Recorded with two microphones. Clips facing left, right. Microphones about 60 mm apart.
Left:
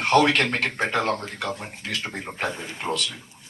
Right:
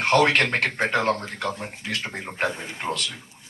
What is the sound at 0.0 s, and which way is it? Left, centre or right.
Speech, right.